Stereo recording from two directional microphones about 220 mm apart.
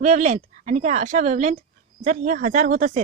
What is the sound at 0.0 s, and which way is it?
Speech, 30° right (ahead or behind).